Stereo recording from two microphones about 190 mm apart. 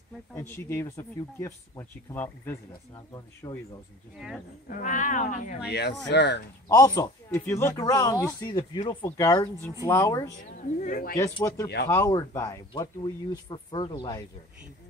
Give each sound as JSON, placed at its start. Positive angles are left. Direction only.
{"t": 0.3, "sound": "speech", "side_deg": 10}
{"t": 4.6, "sound": "speech", "side_deg": 45}
{"t": 5.6, "sound": "speech", "side_deg": 60}
{"t": 6.7, "sound": "speech", "side_deg": 20}
{"t": 10.8, "sound": "speech", "side_deg": 50}
{"t": 11.4, "sound": "speech", "side_deg": 15}